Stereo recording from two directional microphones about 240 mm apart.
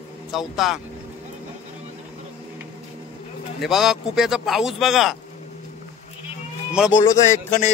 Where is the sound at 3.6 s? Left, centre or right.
Centre.